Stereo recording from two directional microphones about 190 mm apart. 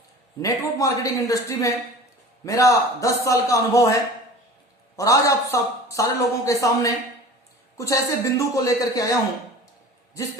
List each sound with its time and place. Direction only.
0.4 s speech: 20° left (ahead or behind)
4.9 s speech: 15° left (ahead or behind)